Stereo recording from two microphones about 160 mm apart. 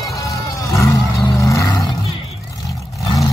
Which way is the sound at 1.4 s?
20° left (ahead or behind).